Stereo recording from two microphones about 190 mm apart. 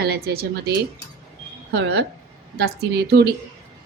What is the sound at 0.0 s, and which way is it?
Speech, 60° right (ahead or behind).